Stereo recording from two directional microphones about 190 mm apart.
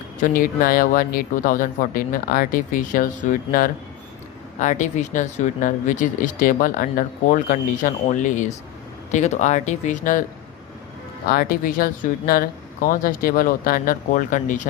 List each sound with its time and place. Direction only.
0.2 s speech: 50° left (ahead or behind)
11.3 s speech: 50° left (ahead or behind)